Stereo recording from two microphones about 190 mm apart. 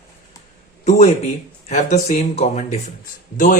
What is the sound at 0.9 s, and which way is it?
A man's voice, 35° left (ahead or behind).